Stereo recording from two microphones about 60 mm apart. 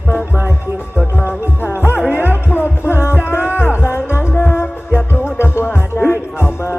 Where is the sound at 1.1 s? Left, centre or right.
Left.